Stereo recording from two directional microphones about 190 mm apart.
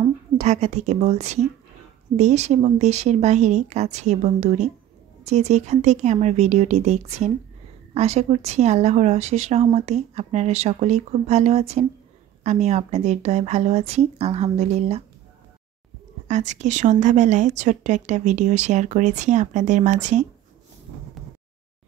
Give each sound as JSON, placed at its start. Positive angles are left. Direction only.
{"t": 0.4, "sound": "speech", "side_deg": -35}
{"t": 16.3, "sound": "speech", "side_deg": -40}